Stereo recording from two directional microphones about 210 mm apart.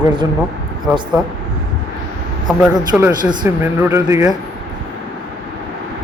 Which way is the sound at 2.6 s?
5° right (ahead or behind).